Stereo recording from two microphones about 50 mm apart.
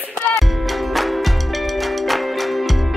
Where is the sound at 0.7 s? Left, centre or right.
Centre.